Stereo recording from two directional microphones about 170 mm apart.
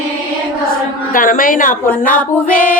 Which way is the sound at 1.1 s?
55° left (ahead or behind).